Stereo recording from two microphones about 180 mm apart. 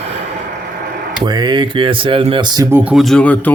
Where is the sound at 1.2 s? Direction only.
25° right (ahead or behind).